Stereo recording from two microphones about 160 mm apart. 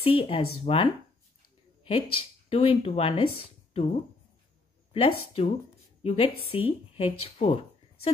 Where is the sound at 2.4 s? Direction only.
35° left (ahead or behind).